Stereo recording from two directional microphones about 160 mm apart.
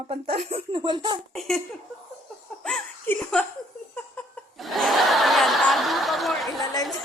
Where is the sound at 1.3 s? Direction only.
Centre (ahead or behind).